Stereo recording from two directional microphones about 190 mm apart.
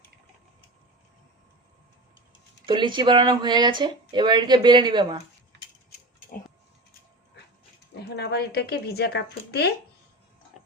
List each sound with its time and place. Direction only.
2.6 s speech: 25° right (ahead or behind)
7.9 s speech: 60° left (ahead or behind)